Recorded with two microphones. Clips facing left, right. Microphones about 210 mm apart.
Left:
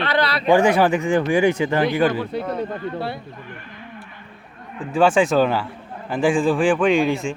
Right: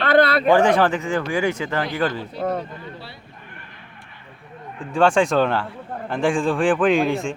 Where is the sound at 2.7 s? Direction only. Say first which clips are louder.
Left 10 dB; 55° left (ahead or behind).